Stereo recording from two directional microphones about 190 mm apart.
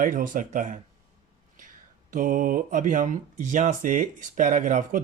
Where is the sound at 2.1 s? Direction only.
45° right (ahead or behind).